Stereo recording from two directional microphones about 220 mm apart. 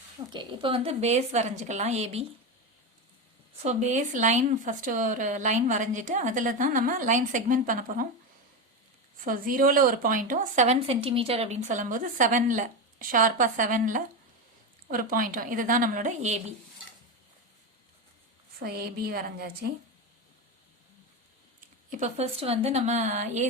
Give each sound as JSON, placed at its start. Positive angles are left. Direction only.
{"t": 0.3, "sound": "speech", "side_deg": -25}
{"t": 3.6, "sound": "speech", "side_deg": -30}
{"t": 9.2, "sound": "speech", "side_deg": -40}
{"t": 18.6, "sound": "a woman's voice", "side_deg": -45}
{"t": 21.8, "sound": "speech", "side_deg": -35}